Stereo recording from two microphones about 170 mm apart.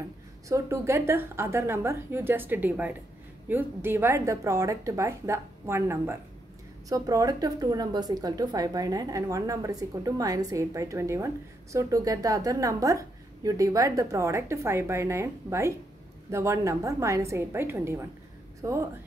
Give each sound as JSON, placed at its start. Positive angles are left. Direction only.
{"t": 0.5, "sound": "a woman's voice", "side_deg": -15}